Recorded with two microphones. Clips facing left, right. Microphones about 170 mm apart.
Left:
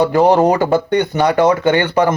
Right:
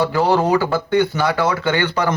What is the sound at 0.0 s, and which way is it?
Speech, 15° left (ahead or behind).